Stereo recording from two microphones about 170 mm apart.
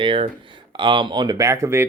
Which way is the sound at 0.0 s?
30° right (ahead or behind).